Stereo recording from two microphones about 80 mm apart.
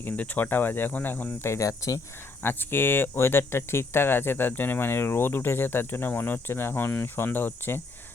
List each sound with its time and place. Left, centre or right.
0.0 s speech: left
2.4 s speech: left